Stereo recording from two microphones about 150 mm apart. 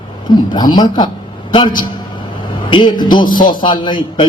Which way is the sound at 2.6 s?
35° left (ahead or behind).